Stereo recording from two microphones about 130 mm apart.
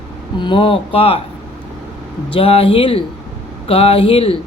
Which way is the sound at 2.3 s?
45° left (ahead or behind).